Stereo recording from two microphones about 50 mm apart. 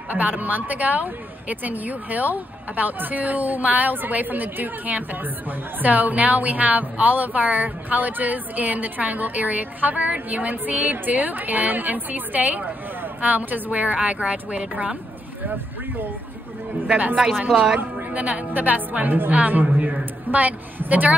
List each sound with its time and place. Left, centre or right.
0.1 s a woman's voice: right
16.8 s speech: right